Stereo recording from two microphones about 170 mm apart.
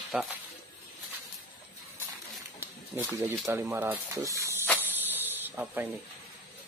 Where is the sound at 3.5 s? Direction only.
15° right (ahead or behind).